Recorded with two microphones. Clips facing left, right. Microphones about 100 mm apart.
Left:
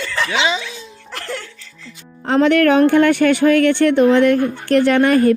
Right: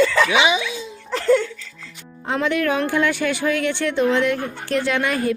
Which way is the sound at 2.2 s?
65° left (ahead or behind).